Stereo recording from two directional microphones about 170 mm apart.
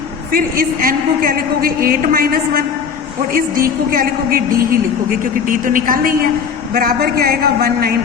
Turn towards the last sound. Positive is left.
turn(degrees=-65)  # may be behind; listen again after turning